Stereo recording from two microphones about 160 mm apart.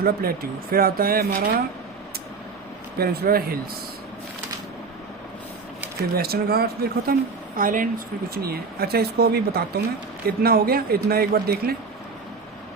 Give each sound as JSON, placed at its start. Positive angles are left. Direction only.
{"t": 0.0, "sound": "speech", "side_deg": -65}
{"t": 3.0, "sound": "speech", "side_deg": -80}
{"t": 6.1, "sound": "speech", "side_deg": -75}
{"t": 7.1, "sound": "speech", "side_deg": -60}